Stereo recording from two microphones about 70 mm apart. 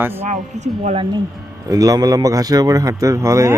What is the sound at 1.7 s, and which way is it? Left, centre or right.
A man's voice, right.